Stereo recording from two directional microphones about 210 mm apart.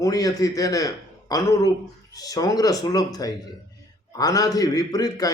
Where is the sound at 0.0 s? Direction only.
15° left (ahead or behind).